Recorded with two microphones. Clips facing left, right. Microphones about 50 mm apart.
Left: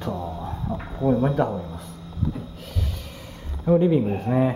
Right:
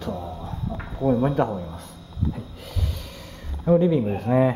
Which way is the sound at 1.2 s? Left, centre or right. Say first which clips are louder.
Even; centre.